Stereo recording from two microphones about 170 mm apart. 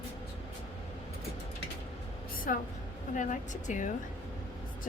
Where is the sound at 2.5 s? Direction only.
55° left (ahead or behind).